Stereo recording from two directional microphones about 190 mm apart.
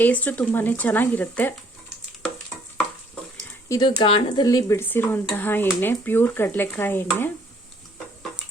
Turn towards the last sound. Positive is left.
turn(degrees=10)  # may be behind; listen again after turning